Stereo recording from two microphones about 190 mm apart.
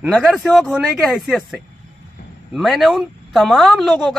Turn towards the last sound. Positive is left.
turn(degrees=0)  # may be behind; listen again after turning